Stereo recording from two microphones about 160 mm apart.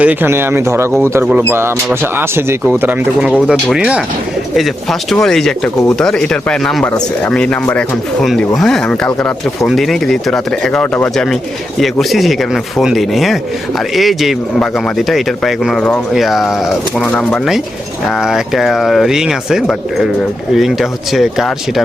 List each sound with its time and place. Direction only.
0.0 s speech: 10° right (ahead or behind)